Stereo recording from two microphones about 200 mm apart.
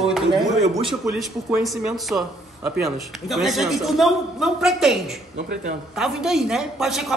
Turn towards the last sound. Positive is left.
turn(degrees=0)  # may be behind; listen again after turning